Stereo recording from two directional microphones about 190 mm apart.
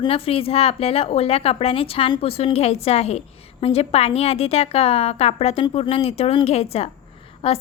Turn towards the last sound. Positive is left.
turn(degrees=30)  # may be behind; listen again after turning